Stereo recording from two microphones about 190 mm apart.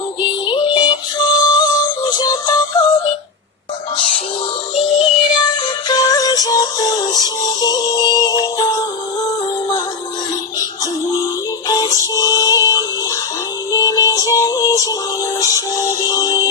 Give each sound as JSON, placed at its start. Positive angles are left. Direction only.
{"t": 0.2, "sound": "music", "side_deg": 25}
{"t": 4.7, "sound": "music", "side_deg": 25}
{"t": 11.1, "sound": "synthetic singing", "side_deg": 20}
{"t": 13.7, "sound": "music", "side_deg": 20}